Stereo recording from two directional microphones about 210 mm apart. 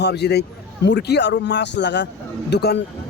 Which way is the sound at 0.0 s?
50° left (ahead or behind).